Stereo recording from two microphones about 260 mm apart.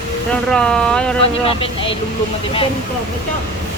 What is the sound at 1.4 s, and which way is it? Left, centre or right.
Speech, left.